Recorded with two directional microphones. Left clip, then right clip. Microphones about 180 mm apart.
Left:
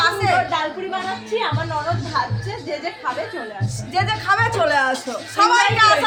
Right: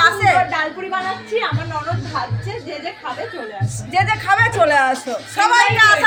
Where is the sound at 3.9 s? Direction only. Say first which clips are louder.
Right 3 dB; 5° right (ahead or behind).